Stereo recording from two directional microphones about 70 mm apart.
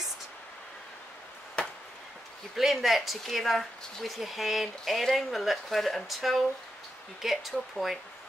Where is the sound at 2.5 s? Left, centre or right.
Centre.